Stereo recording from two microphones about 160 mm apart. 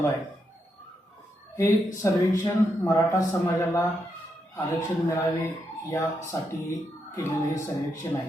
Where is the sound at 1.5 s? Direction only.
20° left (ahead or behind).